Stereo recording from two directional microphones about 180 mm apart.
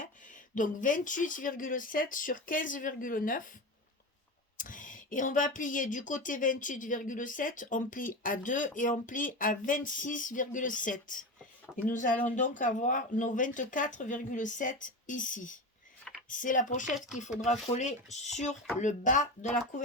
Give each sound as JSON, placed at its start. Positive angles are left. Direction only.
{"t": 0.5, "sound": "speech", "side_deg": 45}
{"t": 4.5, "sound": "speech", "side_deg": 50}